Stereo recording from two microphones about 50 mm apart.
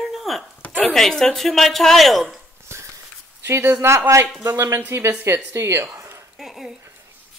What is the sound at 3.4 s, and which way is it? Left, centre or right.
Speech, right.